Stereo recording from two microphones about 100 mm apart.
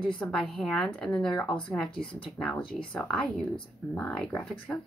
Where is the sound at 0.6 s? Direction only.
5° left (ahead or behind).